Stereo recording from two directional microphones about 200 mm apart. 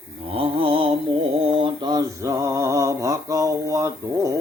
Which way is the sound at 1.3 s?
25° right (ahead or behind).